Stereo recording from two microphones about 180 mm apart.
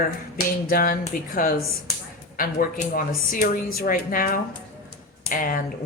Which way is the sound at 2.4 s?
50° left (ahead or behind).